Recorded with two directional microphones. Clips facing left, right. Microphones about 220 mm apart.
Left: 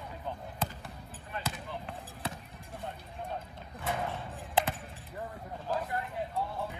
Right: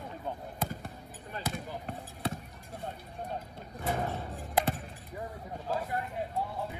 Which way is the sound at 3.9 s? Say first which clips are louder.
Right 2 dB; 40° right (ahead or behind).